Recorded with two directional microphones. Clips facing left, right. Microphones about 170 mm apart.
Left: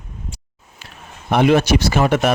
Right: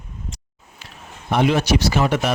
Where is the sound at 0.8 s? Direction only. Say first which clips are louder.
Left 2 dB; 60° left (ahead or behind).